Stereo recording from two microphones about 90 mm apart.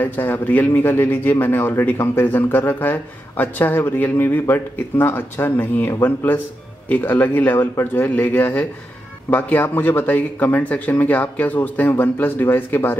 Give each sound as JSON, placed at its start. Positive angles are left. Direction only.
{"t": 0.0, "sound": "a man's voice", "side_deg": 20}